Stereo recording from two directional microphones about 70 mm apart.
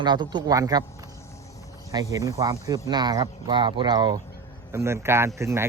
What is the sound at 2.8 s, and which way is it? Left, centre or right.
Speech, right.